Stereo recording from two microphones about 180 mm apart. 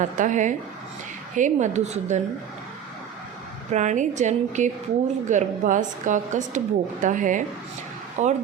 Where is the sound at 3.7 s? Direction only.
40° right (ahead or behind).